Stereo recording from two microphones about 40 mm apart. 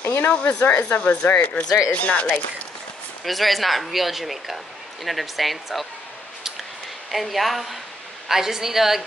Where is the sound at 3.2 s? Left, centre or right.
Centre.